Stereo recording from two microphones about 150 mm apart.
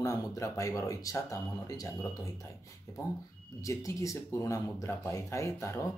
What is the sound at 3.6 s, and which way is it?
Speech, 20° left (ahead or behind).